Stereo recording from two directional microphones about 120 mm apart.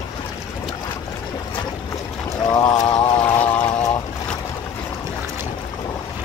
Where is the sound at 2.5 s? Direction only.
35° left (ahead or behind).